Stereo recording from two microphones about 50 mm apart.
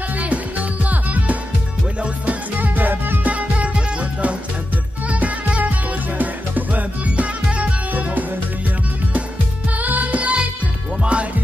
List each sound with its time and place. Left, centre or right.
0.1 s music: right
2.7 s music: right
3.3 s music: right
9.8 s music: right